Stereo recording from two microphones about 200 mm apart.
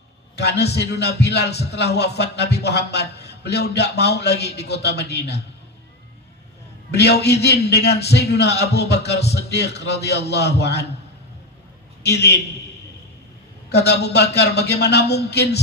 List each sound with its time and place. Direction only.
0.3 s a man's voice: 55° left (ahead or behind)
6.9 s a man's voice: 55° left (ahead or behind)
12.0 s a man's voice: 55° left (ahead or behind)
13.7 s a man's voice: 55° left (ahead or behind)